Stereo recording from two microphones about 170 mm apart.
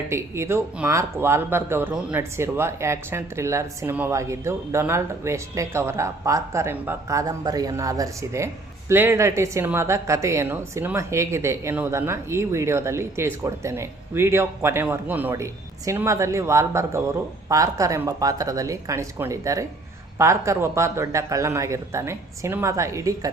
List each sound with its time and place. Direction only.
0.1 s a woman's voice: 15° right (ahead or behind)